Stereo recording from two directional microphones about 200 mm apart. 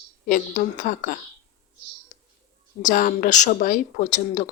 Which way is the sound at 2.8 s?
40° left (ahead or behind).